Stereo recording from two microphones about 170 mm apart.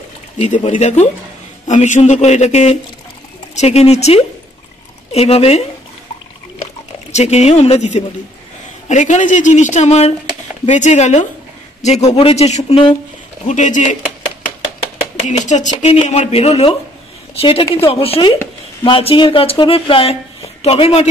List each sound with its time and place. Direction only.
0.4 s speech: 45° left (ahead or behind)
7.1 s speech: 40° left (ahead or behind)
13.5 s speech: 45° left (ahead or behind)
15.2 s speech: 45° left (ahead or behind)